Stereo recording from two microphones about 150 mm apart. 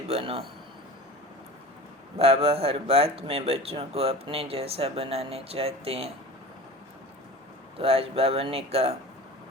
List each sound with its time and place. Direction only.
0.1 s a sound: 40° right (ahead or behind)
2.1 s speech: 40° right (ahead or behind)
7.8 s speech: 40° right (ahead or behind)